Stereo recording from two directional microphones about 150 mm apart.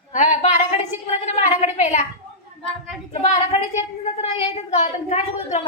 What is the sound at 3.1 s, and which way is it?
Speech, 50° left (ahead or behind).